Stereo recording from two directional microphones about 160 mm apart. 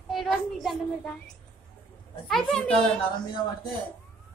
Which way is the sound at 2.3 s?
Centre (ahead or behind).